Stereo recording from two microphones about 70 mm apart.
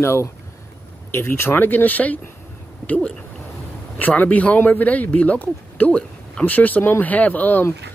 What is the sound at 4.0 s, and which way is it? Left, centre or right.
Speech, left.